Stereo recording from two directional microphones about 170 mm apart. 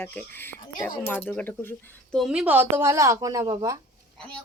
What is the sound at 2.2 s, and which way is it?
Speech, 5° right (ahead or behind).